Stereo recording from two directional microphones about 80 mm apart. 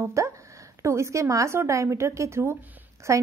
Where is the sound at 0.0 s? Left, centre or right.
Right.